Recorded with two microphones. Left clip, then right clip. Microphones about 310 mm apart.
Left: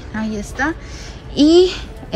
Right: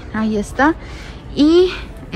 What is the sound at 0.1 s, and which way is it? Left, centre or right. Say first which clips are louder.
A woman's voice: right 5 dB; centre.